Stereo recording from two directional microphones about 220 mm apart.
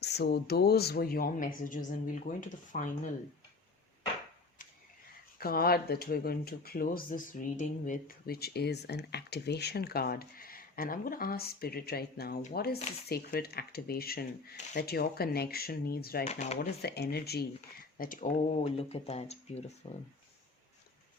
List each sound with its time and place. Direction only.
0.0 s speech: 50° left (ahead or behind)
5.4 s speech: 45° left (ahead or behind)
16.3 s speech: 30° left (ahead or behind)
16.6 s speech: 50° left (ahead or behind); by 19.7 s 30° left (ahead or behind)